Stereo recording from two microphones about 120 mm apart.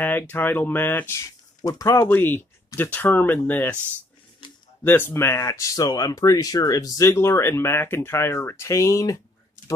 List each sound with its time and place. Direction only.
0.0 s speech: 15° left (ahead or behind)
2.0 s speech: 15° left (ahead or behind)
4.8 s speech: 20° left (ahead or behind)